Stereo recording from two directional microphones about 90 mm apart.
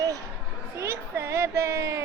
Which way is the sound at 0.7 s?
30° right (ahead or behind).